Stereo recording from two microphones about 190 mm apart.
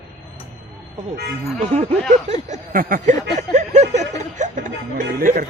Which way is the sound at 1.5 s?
35° right (ahead or behind).